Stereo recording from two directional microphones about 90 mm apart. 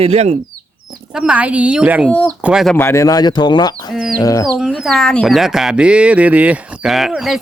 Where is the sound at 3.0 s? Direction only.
50° left (ahead or behind).